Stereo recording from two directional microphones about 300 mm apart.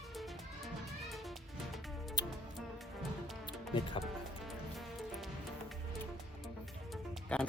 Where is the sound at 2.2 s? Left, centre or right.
Centre.